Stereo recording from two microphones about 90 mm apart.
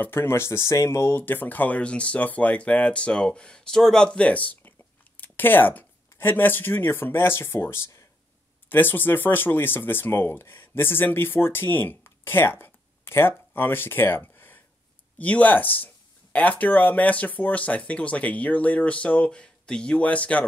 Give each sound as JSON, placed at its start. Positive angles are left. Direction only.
{"t": 0.0, "sound": "speech", "side_deg": 25}